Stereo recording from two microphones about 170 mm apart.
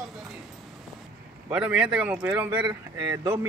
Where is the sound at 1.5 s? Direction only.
5° right (ahead or behind).